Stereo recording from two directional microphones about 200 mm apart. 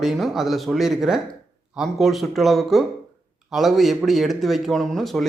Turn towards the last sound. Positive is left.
turn(degrees=0)  # may be behind; listen again after turning